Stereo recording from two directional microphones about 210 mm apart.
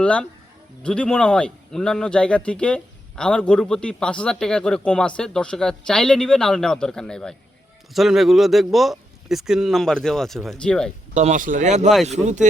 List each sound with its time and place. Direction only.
0.0 s speech: 5° left (ahead or behind)
11.1 s speech: 35° right (ahead or behind)